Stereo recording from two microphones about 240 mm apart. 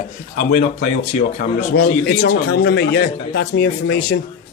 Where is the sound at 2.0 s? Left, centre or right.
Left.